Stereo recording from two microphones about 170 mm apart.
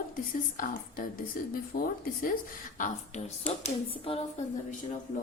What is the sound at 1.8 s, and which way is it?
Speech, 55° left (ahead or behind).